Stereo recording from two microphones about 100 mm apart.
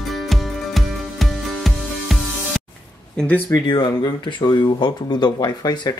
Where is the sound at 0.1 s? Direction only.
Centre (ahead or behind).